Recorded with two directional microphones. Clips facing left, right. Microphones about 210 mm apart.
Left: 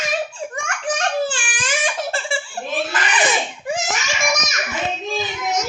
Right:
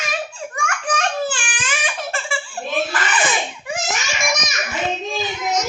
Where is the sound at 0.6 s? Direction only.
25° left (ahead or behind).